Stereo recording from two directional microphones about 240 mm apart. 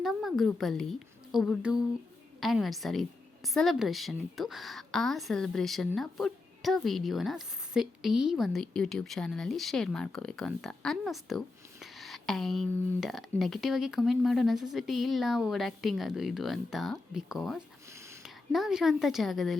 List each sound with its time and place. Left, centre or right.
0.0 s a woman's voice: centre